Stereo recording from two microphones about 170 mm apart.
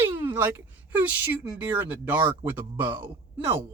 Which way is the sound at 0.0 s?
15° right (ahead or behind).